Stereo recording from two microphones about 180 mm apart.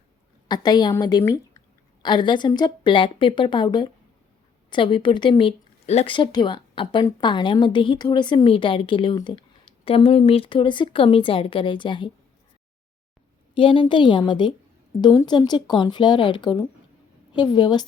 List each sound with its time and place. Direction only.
0.4 s speech: 25° left (ahead or behind)
13.6 s speech: 30° left (ahead or behind)